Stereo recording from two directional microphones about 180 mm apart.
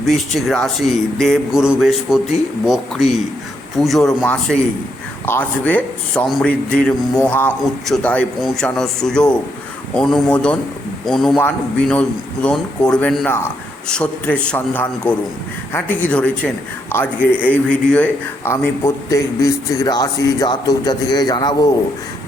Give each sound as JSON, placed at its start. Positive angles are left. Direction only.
{"t": 0.0, "sound": "a man's voice", "side_deg": 0}